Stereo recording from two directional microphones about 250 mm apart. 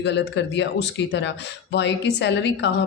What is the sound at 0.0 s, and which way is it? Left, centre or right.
Speech, left.